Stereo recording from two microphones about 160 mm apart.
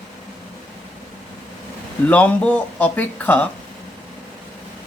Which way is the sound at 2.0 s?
10° left (ahead or behind).